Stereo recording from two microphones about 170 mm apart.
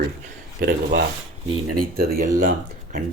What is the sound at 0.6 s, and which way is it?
Speech, 65° right (ahead or behind).